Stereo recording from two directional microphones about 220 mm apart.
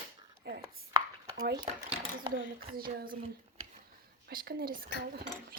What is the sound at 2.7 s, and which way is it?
Speech, 40° right (ahead or behind).